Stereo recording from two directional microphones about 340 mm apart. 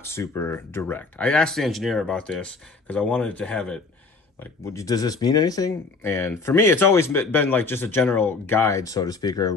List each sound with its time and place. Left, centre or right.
0.0 s speech: centre